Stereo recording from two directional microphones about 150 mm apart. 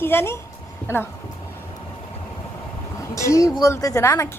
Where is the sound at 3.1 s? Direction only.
20° left (ahead or behind).